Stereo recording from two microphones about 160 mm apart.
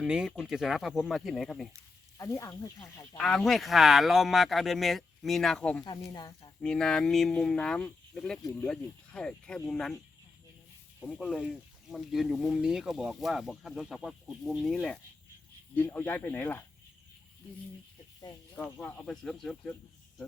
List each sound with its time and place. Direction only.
0.0 s speech: 5° right (ahead or behind)
2.1 s speech: 20° left (ahead or behind)
3.2 s speech: 5° left (ahead or behind)
5.8 s speech: 25° left (ahead or behind)
6.6 s speech: 5° left (ahead or behind)
11.0 s speech: 5° left (ahead or behind)
18.5 s speech: 10° left (ahead or behind)